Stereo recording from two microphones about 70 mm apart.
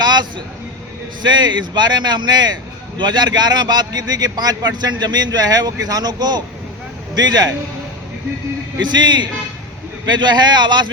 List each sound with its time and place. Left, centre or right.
0.0 s a sound: right
1.2 s a man's voice: right
8.9 s speech: right